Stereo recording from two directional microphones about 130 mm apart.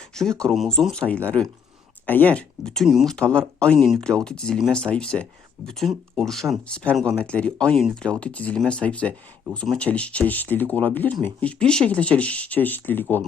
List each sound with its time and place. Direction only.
0.1 s speech: 5° left (ahead or behind)